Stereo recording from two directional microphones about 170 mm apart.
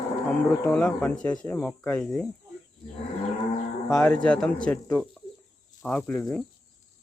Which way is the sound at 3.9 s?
5° left (ahead or behind).